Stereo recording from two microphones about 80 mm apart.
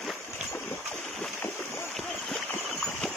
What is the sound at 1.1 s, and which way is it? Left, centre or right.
Boat, centre.